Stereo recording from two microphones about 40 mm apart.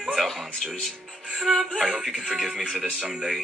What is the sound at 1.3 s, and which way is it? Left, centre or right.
Speech, centre.